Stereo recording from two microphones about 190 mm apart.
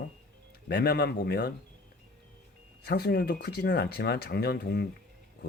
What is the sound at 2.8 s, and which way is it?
Speech, 60° left (ahead or behind).